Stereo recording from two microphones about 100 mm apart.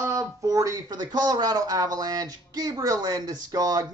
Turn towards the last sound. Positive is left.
turn(degrees=-40)  # may be behind; listen again after turning